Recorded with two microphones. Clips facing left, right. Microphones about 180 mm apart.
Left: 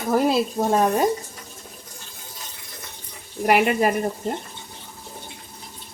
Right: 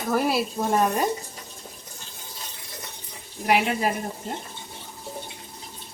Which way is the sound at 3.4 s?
55° left (ahead or behind).